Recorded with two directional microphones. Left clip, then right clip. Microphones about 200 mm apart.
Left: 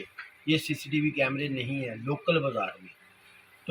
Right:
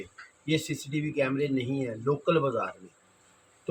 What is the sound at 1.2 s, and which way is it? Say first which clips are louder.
Speech: right 2 dB; 15° right (ahead or behind).